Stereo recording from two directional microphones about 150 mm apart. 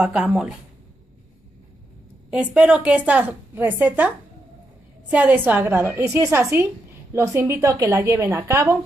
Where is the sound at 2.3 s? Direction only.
10° right (ahead or behind).